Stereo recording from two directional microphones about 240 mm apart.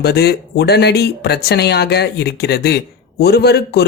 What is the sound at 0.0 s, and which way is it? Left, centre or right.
Speech, left.